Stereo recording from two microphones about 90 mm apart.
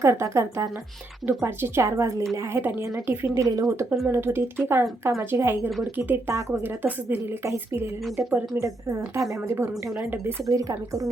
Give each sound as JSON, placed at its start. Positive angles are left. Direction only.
{"t": 0.0, "sound": "a woman's voice", "side_deg": -30}
{"t": 2.6, "sound": "speech", "side_deg": -20}
{"t": 3.3, "sound": "a woman's voice", "side_deg": -40}
{"t": 8.6, "sound": "a woman's voice", "side_deg": -35}